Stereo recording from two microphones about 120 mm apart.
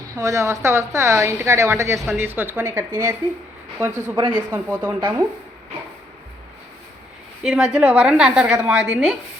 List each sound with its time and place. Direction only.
0.1 s a woman's voice: 25° right (ahead or behind); by 4.9 s 10° right (ahead or behind)
7.4 s a woman's voice: 5° right (ahead or behind)